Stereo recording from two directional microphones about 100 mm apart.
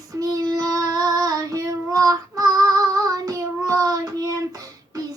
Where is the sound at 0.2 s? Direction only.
40° right (ahead or behind).